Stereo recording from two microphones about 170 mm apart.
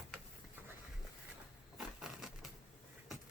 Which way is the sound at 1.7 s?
Centre (ahead or behind).